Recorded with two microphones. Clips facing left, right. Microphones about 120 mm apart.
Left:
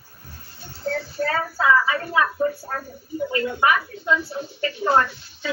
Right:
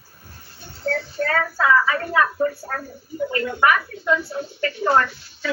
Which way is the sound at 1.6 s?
25° left (ahead or behind).